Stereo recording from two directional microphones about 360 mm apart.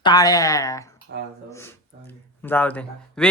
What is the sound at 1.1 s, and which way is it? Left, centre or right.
Speech, right.